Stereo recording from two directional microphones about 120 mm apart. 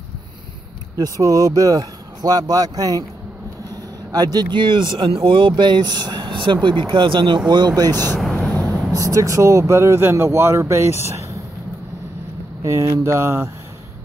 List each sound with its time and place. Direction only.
0.9 s speech: 30° right (ahead or behind)
4.1 s speech: 35° right (ahead or behind)
8.2 s a sound: 5° left (ahead or behind)
8.9 s speech: 30° right (ahead or behind)
12.6 s speech: 25° right (ahead or behind)